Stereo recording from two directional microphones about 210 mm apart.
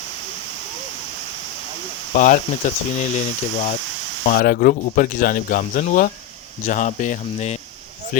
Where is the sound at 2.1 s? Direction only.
35° left (ahead or behind).